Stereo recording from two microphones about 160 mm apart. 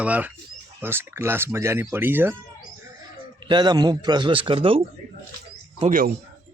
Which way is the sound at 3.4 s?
25° right (ahead or behind).